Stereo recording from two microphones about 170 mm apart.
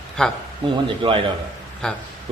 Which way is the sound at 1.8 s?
5° left (ahead or behind).